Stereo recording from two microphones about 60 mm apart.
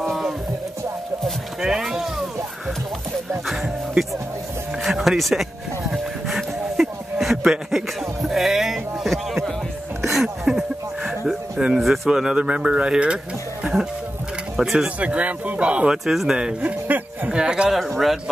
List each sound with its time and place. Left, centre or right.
1.6 s speech: centre
4.8 s music: centre
10.0 s a sound: centre
11.6 s speech: centre
12.4 s speech: centre
14.6 s a man's voice: centre
15.0 s speech: right
16.1 s speech: centre
16.8 s a sound: right
17.3 s speech: centre
17.7 s a man's voice: centre